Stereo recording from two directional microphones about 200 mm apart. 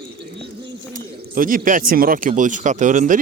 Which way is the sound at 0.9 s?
45° right (ahead or behind).